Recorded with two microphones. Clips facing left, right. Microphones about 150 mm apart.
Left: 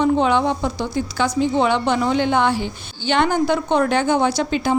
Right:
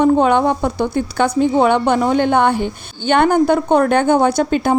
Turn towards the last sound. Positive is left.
turn(degrees=-50)  # may be behind; listen again after turning